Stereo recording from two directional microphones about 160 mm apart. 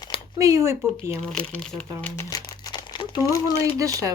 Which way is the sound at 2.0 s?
20° left (ahead or behind).